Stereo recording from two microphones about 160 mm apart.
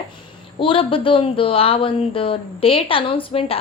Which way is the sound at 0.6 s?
35° left (ahead or behind).